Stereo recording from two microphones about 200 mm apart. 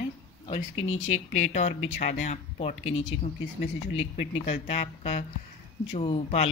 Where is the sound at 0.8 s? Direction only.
90° left.